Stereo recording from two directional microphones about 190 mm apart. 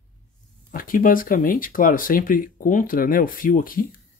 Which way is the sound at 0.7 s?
50° left (ahead or behind).